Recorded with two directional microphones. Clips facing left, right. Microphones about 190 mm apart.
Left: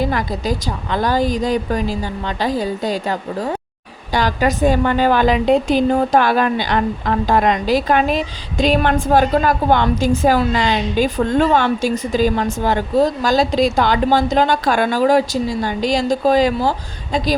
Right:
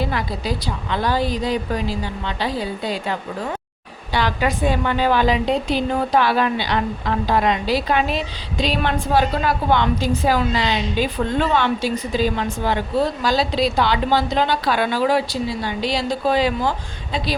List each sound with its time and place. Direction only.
0.0 s a woman's voice: 45° left (ahead or behind)